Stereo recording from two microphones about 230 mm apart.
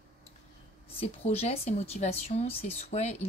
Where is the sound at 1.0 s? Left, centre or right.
Left.